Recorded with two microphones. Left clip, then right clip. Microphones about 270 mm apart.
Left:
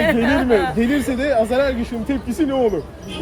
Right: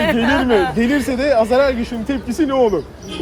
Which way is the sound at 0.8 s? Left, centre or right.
Centre.